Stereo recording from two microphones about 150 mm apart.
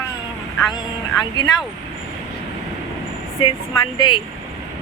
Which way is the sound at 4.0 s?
35° left (ahead or behind).